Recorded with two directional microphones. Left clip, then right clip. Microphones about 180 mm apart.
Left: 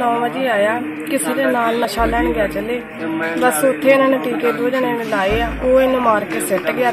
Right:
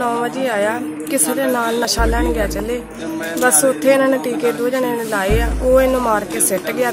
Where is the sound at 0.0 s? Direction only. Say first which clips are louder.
Left 1 dB; 15° right (ahead or behind).